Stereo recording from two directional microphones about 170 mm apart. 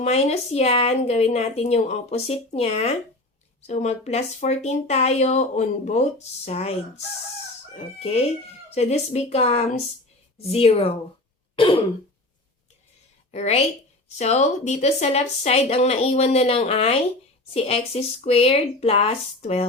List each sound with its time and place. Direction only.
0.0 s speech: 40° left (ahead or behind)
11.5 s throat clearing: 30° left (ahead or behind)
13.3 s speech: 40° left (ahead or behind)